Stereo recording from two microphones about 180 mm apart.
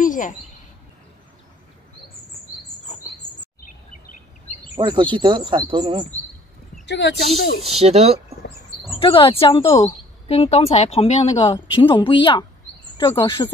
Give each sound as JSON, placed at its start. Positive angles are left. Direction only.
{"t": 0.0, "sound": "bird", "side_deg": 45}
{"t": 4.7, "sound": "speech", "side_deg": -25}
{"t": 6.9, "sound": "speech", "side_deg": 70}
{"t": 7.2, "sound": "speech", "side_deg": 0}
{"t": 7.8, "sound": "speech", "side_deg": -35}
{"t": 9.0, "sound": "a woman's voice", "side_deg": 30}
{"t": 9.7, "sound": "a woman's voice", "side_deg": 20}
{"t": 10.2, "sound": "a woman's voice", "side_deg": 35}